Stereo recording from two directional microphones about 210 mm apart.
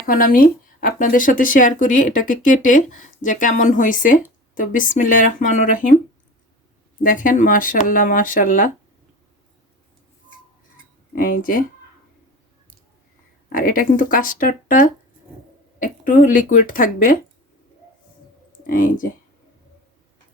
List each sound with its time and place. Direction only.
0.0 s speech: 45° left (ahead or behind)
7.0 s speech: 40° left (ahead or behind)
11.1 s speech: 40° left (ahead or behind)
13.5 s speech: 40° left (ahead or behind)
18.6 s speech: 40° left (ahead or behind)